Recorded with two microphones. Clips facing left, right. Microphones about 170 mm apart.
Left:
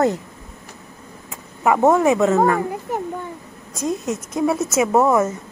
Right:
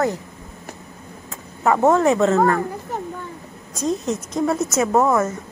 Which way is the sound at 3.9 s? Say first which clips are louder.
Right 1 dB; 5° left (ahead or behind).